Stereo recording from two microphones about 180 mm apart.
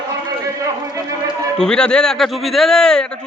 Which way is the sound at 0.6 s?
20° right (ahead or behind).